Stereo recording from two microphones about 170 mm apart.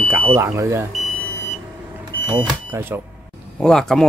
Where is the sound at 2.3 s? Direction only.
10° right (ahead or behind).